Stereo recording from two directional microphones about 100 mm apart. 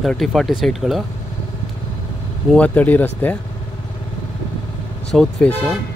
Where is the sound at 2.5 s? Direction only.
15° left (ahead or behind).